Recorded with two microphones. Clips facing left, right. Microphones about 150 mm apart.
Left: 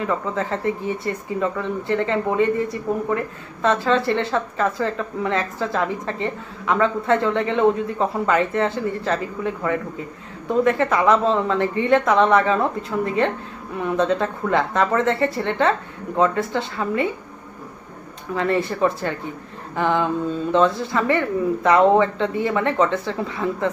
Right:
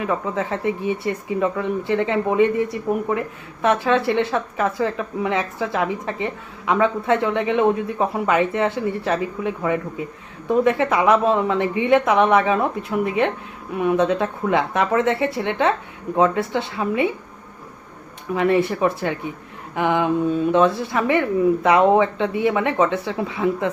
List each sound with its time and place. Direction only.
0.0 s speech: 15° right (ahead or behind)
18.3 s speech: 15° right (ahead or behind)